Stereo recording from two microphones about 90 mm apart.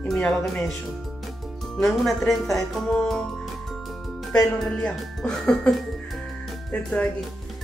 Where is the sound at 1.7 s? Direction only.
5° left (ahead or behind).